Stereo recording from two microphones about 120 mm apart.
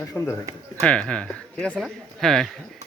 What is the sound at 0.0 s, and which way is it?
Speech, 20° left (ahead or behind).